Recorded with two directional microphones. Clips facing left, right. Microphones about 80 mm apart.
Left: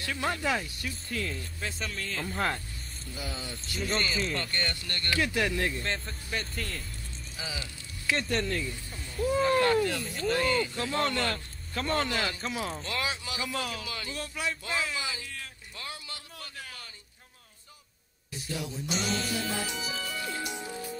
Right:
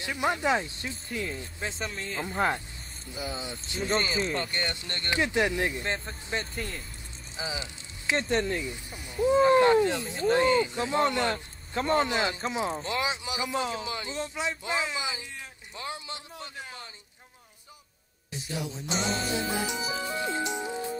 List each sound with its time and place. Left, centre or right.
0.0 s speech: centre
3.3 s speech: right
3.9 s speech: right
4.4 s speech: centre
6.0 s speech: right
6.5 s speech: centre
7.3 s speech: right
18.9 s speech: right
20.0 s music: right